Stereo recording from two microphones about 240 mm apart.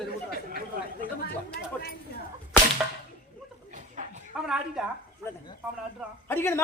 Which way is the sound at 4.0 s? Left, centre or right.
Right.